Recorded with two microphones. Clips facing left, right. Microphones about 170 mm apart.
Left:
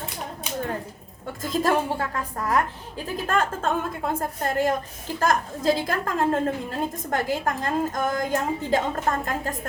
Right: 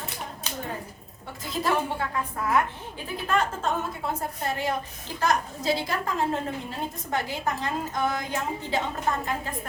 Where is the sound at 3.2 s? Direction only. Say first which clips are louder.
Left 1 dB; 50° left (ahead or behind).